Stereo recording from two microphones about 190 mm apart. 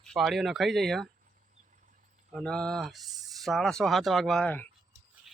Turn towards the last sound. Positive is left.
turn(degrees=5)  # may be behind; listen again after turning